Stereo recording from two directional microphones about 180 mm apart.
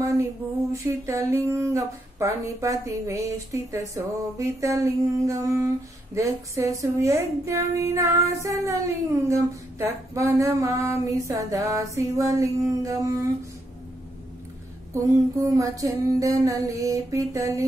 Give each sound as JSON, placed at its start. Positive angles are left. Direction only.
{"t": 0.8, "sound": "a woman's voice", "side_deg": -15}
{"t": 15.0, "sound": "a woman's voice", "side_deg": -20}